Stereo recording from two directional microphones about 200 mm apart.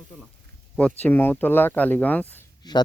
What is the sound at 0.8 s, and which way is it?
Speech, 5° left (ahead or behind).